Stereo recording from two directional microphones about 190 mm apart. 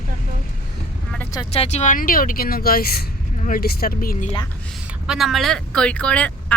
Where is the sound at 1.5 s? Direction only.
35° left (ahead or behind); by 4.2 s 50° left (ahead or behind).